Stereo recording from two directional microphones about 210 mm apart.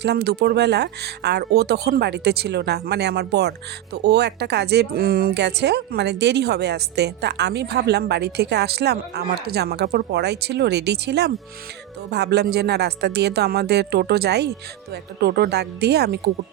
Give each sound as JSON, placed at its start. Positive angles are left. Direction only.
{"t": 0.0, "sound": "speech", "side_deg": -50}